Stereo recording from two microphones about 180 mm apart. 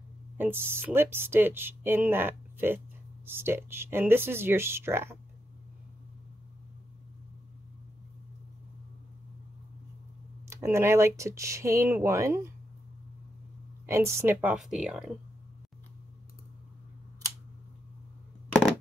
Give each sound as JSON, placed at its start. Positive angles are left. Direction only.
{"t": 0.4, "sound": "speech", "side_deg": -10}
{"t": 10.5, "sound": "speech", "side_deg": -15}
{"t": 13.8, "sound": "speech", "side_deg": -15}